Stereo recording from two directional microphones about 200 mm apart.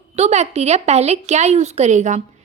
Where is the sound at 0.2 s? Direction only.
35° right (ahead or behind).